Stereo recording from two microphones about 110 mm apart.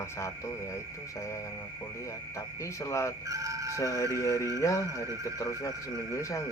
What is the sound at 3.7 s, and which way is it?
Speech, 30° left (ahead or behind).